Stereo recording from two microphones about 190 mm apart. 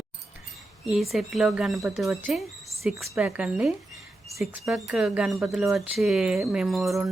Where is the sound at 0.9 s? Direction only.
Centre (ahead or behind).